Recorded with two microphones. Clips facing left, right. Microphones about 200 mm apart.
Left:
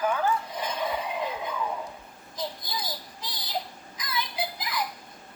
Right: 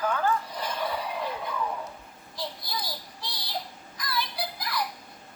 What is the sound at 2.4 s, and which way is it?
Child singing, 20° left (ahead or behind).